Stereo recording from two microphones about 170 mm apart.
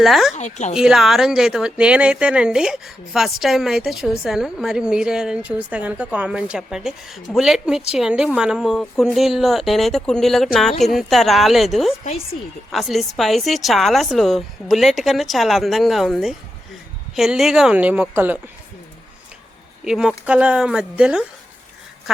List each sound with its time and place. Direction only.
0.0 s speech: centre (ahead or behind)
0.3 s a woman's voice: 45° left (ahead or behind)
0.7 s speech: 5° right (ahead or behind)
12.0 s speech: 35° left (ahead or behind)
12.7 s speech: centre (ahead or behind)
19.8 s speech: 5° right (ahead or behind)